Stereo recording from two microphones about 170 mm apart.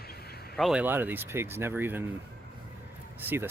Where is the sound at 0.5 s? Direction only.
Centre (ahead or behind).